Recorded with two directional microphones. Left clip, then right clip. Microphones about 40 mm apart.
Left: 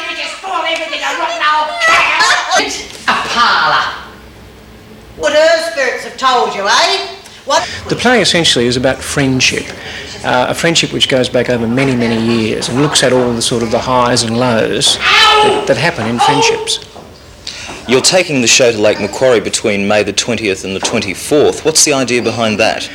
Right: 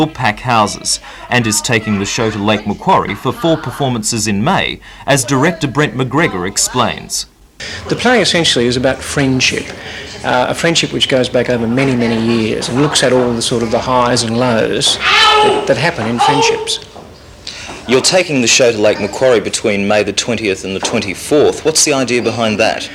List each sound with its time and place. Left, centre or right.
0.7 s speech: left
6.3 s speech: left
7.9 s speech: left
17.8 s speech: left